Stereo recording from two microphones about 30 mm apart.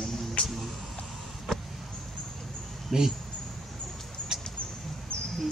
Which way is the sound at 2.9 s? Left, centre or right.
Centre.